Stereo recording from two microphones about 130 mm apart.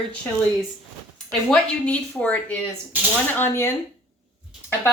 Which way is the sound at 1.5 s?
10° left (ahead or behind).